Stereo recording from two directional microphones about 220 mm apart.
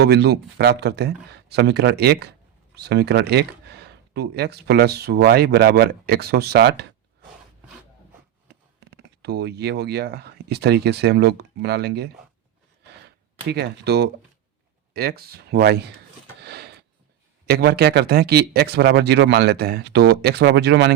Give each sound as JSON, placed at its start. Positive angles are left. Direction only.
{"t": 0.0, "sound": "speech", "side_deg": -50}
{"t": 8.9, "sound": "speech", "side_deg": -50}
{"t": 12.9, "sound": "gasp", "side_deg": -45}
{"t": 14.9, "sound": "speech", "side_deg": -45}
{"t": 16.4, "sound": "a sound", "side_deg": -50}
{"t": 17.4, "sound": "speech", "side_deg": -45}